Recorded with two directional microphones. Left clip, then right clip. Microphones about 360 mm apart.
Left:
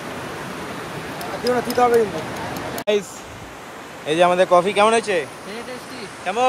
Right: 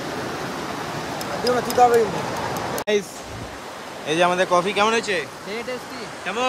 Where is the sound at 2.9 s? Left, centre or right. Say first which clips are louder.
Left 2 dB; centre.